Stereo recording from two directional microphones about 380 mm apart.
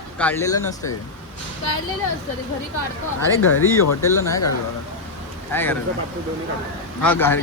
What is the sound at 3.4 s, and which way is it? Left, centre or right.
Speech, left.